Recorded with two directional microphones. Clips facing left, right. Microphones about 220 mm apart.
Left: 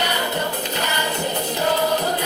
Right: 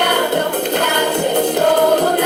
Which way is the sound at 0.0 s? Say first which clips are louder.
Right 8 dB; 55° right (ahead or behind).